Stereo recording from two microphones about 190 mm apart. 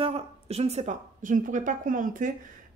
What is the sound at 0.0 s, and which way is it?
A man's voice, 30° right (ahead or behind).